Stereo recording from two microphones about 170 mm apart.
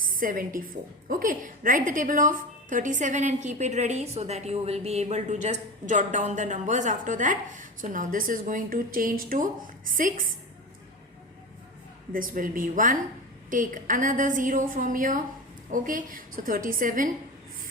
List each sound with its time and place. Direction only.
0.0 s a woman's voice: 55° right (ahead or behind)
12.1 s a woman's voice: 55° right (ahead or behind)